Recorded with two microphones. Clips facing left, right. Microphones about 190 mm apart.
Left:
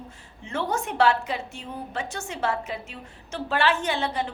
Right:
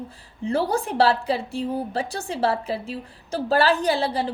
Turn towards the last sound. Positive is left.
turn(degrees=-35)  # may be behind; listen again after turning